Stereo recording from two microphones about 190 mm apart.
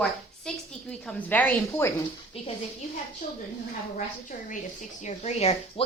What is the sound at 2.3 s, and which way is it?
Speech, 30° left (ahead or behind).